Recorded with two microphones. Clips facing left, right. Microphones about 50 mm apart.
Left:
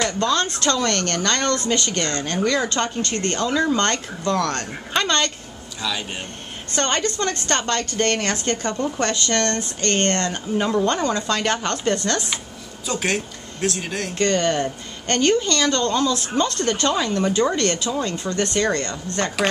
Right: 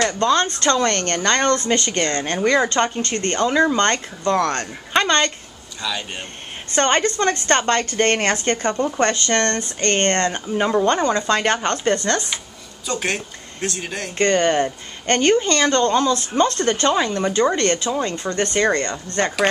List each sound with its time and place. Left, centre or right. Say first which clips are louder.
0.2 s speech: right 3 dB; right
5.8 s speech: even; centre
6.7 s speech: right 4 dB; right
12.8 s speech: even; centre
14.1 s speech: right 3 dB; right
17.3 s speech: right 2 dB; centre
17.6 s speech: right 2 dB; right